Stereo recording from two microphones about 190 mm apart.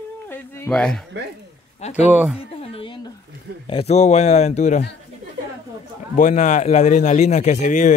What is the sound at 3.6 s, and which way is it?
A man's voice, 30° left (ahead or behind).